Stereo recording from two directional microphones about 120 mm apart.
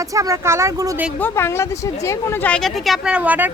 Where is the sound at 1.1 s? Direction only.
15° left (ahead or behind).